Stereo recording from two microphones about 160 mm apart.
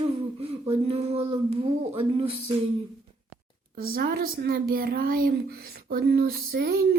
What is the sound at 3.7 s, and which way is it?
Speech, 70° right (ahead or behind).